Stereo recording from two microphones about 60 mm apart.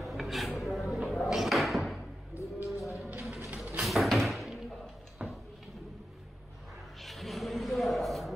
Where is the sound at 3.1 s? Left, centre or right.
Right.